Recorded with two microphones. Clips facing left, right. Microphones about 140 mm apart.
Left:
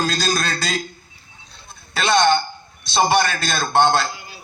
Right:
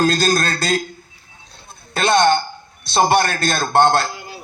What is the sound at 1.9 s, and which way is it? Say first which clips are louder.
A man's voice: right 2 dB; 50° right (ahead or behind).